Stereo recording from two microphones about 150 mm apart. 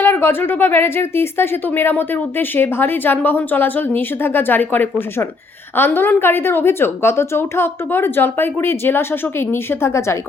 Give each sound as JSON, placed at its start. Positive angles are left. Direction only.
{"t": 0.0, "sound": "speech", "side_deg": 15}